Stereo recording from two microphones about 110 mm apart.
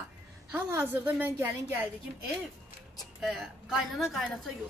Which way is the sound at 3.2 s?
5° right (ahead or behind).